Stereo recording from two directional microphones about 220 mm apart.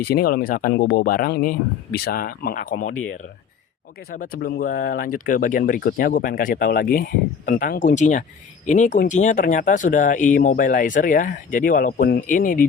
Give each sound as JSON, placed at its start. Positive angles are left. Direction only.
{"t": 0.0, "sound": "speech", "side_deg": 45}
{"t": 4.1, "sound": "speech", "side_deg": 40}